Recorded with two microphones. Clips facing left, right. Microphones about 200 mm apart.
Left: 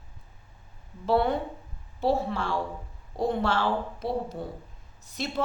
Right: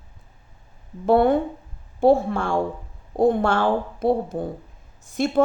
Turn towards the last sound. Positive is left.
turn(degrees=-50)  # may be behind; listen again after turning